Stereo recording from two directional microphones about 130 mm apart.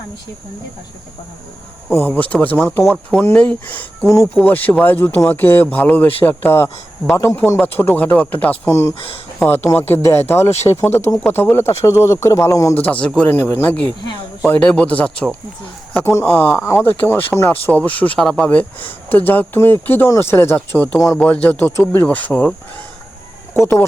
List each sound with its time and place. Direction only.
1.9 s speech: 15° left (ahead or behind)
12.7 s speech: 10° left (ahead or behind)
23.6 s speech: 20° left (ahead or behind)